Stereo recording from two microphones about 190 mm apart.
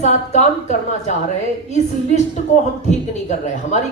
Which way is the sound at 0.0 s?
35° left (ahead or behind).